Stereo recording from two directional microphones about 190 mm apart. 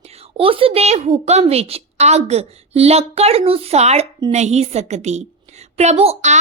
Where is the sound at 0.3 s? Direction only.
30° right (ahead or behind).